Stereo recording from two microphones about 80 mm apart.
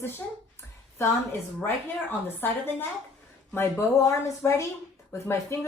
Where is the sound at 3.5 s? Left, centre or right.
Left.